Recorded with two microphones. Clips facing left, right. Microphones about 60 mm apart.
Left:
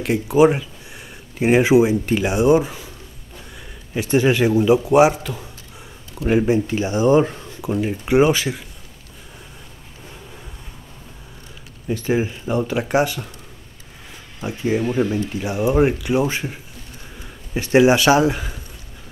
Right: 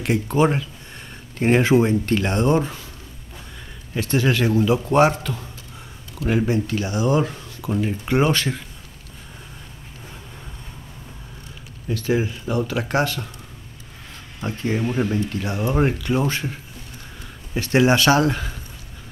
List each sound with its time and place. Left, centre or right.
0.0 s speech: centre
0.4 s speech: centre
3.9 s speech: centre
11.9 s speech: left
14.4 s speech: centre
17.6 s speech: centre